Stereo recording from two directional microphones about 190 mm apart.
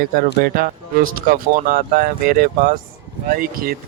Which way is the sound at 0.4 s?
55° right (ahead or behind).